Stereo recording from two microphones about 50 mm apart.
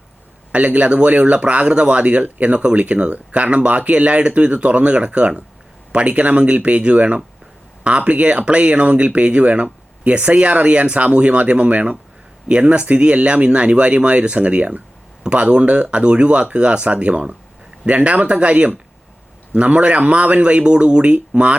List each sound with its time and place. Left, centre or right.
0.5 s speech: right